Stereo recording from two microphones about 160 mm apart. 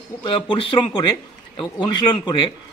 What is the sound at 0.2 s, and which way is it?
A man's voice, 30° left (ahead or behind).